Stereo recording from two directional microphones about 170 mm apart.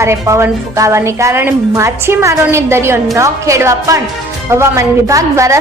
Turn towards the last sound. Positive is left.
turn(degrees=-20)  # may be behind; listen again after turning